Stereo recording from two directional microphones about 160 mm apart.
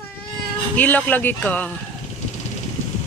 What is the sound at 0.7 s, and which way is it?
Speech, 10° left (ahead or behind).